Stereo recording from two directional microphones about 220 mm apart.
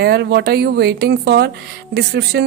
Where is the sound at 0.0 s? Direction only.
50° right (ahead or behind).